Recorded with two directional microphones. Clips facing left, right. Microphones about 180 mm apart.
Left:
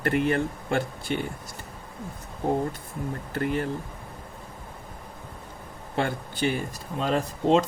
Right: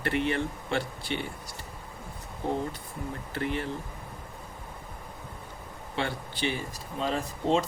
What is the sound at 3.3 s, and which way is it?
Speech, 45° left (ahead or behind).